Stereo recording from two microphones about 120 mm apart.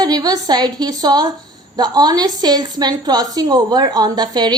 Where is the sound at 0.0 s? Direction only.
35° right (ahead or behind).